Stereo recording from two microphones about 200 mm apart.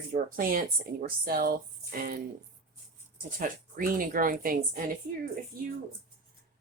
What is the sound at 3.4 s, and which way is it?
Speech, 45° right (ahead or behind).